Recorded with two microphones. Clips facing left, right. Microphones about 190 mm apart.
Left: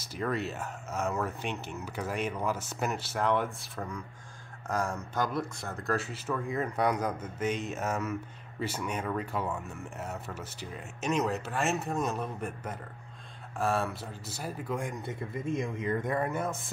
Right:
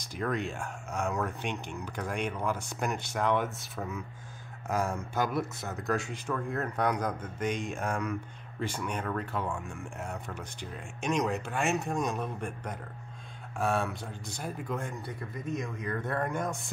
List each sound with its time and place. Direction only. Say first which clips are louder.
0.0 s a man's voice: even; 5° left (ahead or behind)